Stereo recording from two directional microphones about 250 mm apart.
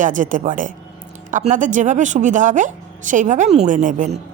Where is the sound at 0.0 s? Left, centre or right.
Right.